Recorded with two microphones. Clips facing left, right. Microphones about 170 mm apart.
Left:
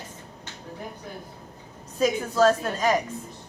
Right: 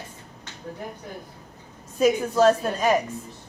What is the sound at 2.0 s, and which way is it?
Speech, 15° right (ahead or behind).